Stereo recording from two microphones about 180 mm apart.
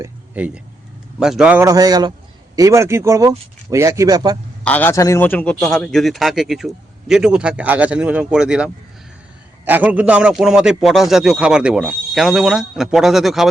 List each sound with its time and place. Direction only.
0.0 s a sound: 10° right (ahead or behind)
1.2 s a man's voice: 5° right (ahead or behind)
1.6 s a man's voice: 20° right (ahead or behind)
4.6 s a man's voice: 10° left (ahead or behind)